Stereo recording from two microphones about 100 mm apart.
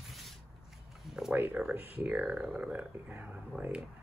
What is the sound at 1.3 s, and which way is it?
Speech, 20° right (ahead or behind).